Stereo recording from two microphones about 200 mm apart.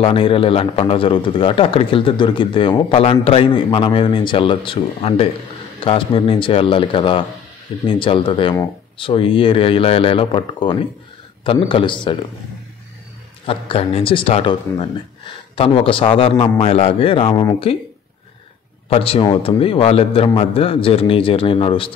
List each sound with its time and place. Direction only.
0.0 s speech: 25° left (ahead or behind)
13.5 s speech: 30° left (ahead or behind)
18.9 s speech: 30° left (ahead or behind)